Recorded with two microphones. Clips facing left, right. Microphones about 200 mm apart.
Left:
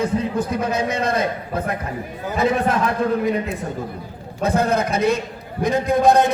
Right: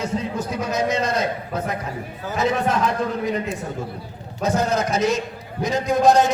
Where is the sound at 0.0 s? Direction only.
55° left (ahead or behind).